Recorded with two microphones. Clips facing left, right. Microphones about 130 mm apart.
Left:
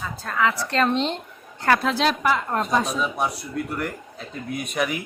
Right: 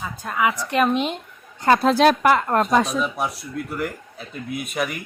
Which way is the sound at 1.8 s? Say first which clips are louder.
Right 6 dB; 45° right (ahead or behind).